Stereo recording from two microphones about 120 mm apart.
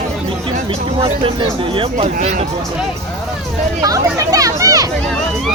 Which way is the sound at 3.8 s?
30° right (ahead or behind).